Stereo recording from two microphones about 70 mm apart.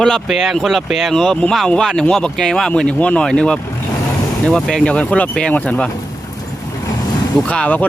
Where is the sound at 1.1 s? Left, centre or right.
Centre.